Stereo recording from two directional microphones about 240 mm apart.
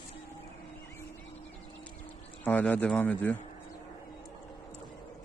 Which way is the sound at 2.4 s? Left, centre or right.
Centre.